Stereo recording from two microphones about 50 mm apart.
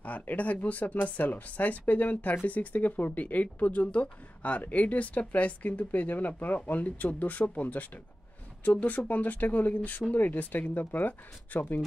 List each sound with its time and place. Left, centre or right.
0.2 s speech: left